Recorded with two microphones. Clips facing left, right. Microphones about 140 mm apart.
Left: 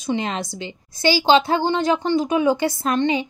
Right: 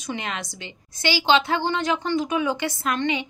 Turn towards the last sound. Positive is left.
turn(degrees=35)  # may be behind; listen again after turning